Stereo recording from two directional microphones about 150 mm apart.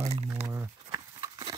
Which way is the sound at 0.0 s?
45° right (ahead or behind).